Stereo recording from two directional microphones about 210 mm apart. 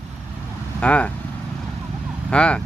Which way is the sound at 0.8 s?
5° left (ahead or behind).